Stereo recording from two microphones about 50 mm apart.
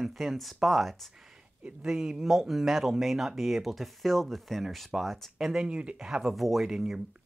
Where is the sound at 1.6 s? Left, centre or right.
Centre.